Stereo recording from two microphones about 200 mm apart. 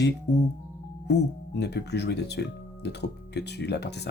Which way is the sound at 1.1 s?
55° left (ahead or behind).